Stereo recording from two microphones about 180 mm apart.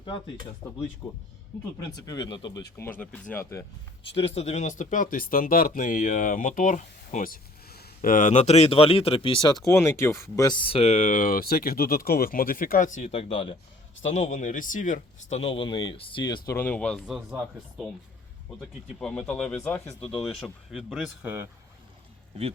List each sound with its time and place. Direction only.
0.6 s speech: 20° left (ahead or behind)
1.0 s speech: 5° left (ahead or behind)
2.0 s speech: 20° left (ahead or behind)
3.0 s speech: 10° left (ahead or behind)
4.4 s speech: 40° left (ahead or behind)
9.6 s speech: 15° left (ahead or behind); by 13.1 s 45° left (ahead or behind)
13.1 s speech: 35° left (ahead or behind)
14.1 s speech: 40° left (ahead or behind); by 17.2 s centre (ahead or behind)
18.6 s speech: 5° left (ahead or behind); by 21.5 s 10° right (ahead or behind)